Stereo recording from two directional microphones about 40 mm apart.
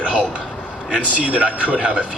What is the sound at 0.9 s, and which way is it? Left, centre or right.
A man's voice, right.